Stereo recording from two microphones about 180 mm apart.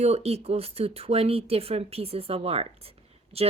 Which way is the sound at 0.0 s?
35° right (ahead or behind).